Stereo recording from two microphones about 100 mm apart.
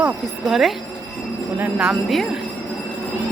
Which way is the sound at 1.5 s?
20° right (ahead or behind).